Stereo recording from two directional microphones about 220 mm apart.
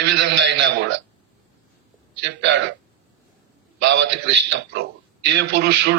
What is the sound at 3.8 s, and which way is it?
A man's voice, 50° right (ahead or behind).